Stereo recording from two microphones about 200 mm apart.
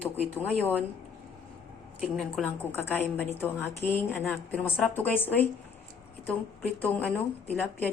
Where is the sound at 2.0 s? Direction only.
Centre (ahead or behind).